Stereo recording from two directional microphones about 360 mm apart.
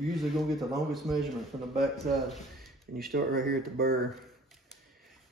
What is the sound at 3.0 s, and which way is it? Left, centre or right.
Speech, right.